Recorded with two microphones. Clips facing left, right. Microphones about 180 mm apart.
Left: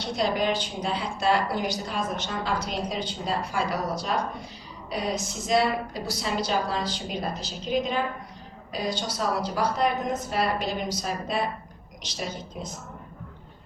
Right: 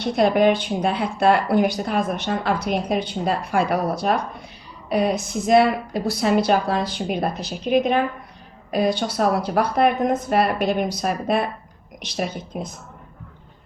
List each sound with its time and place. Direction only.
0.0 s speech: 55° right (ahead or behind)